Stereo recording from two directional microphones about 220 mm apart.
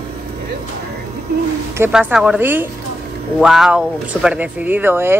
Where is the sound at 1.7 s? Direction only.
10° right (ahead or behind).